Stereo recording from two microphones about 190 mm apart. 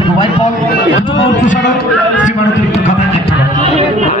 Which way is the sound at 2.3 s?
35° left (ahead or behind).